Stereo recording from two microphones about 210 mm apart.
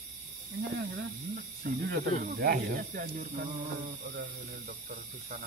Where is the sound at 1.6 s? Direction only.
50° right (ahead or behind).